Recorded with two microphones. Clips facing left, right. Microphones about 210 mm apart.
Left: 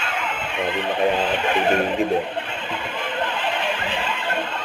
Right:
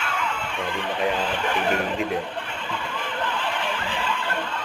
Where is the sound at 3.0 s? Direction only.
20° left (ahead or behind).